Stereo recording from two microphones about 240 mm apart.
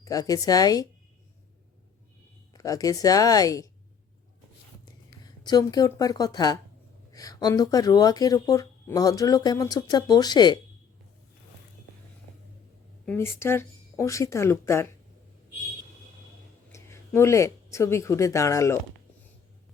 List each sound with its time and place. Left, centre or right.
0.0 s speech: centre
2.5 s speech: centre
5.4 s speech: centre
13.1 s speech: centre
16.7 s speech: centre